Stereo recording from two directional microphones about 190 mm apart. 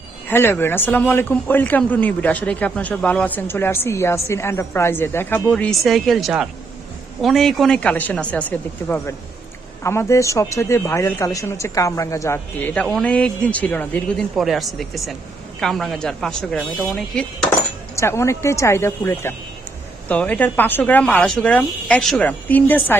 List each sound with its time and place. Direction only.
0.3 s a man's voice: 10° left (ahead or behind)
17.9 s a man's voice: 15° left (ahead or behind)